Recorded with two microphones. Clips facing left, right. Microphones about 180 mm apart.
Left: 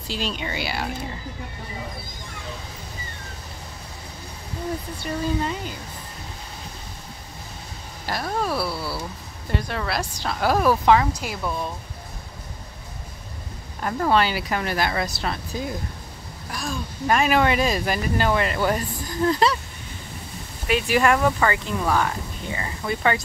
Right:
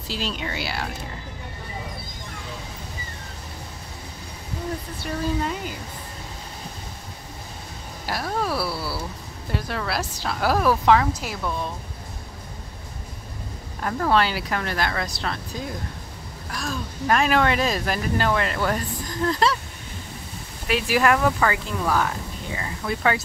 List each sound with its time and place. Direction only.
0.1 s speech: centre (ahead or behind)
5.0 s speech: centre (ahead or behind)
8.1 s speech: centre (ahead or behind)
13.7 s speech: 5° left (ahead or behind)
20.6 s speech: centre (ahead or behind)